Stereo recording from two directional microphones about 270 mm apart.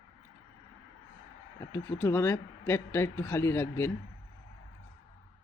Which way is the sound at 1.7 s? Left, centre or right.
Centre.